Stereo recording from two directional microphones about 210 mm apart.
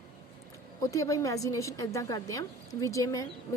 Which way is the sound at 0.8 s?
15° left (ahead or behind).